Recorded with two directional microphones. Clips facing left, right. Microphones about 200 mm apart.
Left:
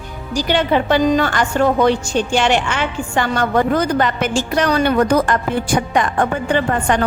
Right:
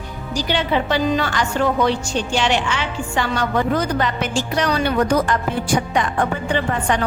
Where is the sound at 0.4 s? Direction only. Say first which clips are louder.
Left 4 dB; 50° left (ahead or behind).